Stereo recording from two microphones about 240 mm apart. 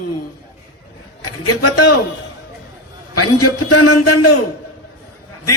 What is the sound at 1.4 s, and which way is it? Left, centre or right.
Speech, left.